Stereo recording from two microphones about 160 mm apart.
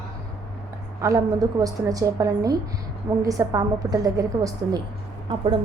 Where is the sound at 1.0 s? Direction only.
20° right (ahead or behind).